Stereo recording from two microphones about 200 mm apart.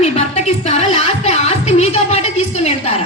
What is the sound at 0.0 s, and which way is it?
Music, 35° left (ahead or behind).